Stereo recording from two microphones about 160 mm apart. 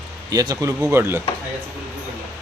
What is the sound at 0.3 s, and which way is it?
Speech, 20° right (ahead or behind).